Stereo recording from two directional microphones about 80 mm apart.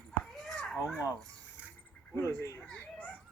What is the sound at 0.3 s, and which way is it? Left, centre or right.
Children playing, centre.